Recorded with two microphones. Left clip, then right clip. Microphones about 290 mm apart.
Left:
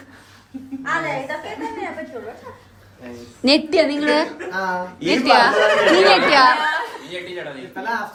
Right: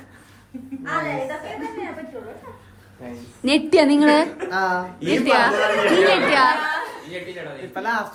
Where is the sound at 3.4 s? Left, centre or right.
Centre.